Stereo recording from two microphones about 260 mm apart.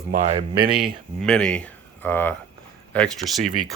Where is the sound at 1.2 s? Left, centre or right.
Centre.